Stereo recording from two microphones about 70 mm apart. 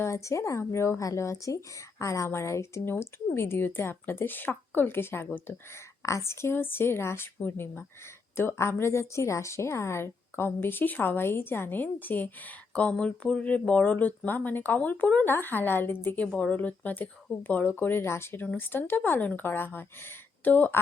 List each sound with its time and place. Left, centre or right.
0.0 s speech: left
6.0 s a woman's voice: left
16.2 s a woman's voice: centre